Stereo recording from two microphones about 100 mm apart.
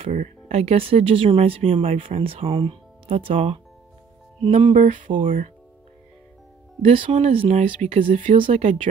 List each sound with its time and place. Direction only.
0.0 s speech: 90° right; by 3.6 s 70° right (ahead or behind)
4.4 s speech: 80° right
6.8 s speech: 65° right (ahead or behind)